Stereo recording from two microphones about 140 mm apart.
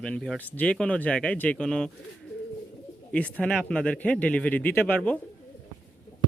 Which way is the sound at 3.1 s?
10° left (ahead or behind).